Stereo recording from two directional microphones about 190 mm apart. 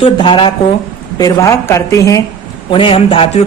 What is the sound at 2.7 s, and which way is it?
Speech, 25° left (ahead or behind).